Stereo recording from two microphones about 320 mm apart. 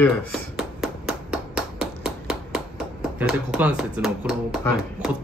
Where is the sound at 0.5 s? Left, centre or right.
Centre.